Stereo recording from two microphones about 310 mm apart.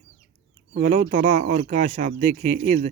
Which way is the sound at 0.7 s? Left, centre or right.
Right.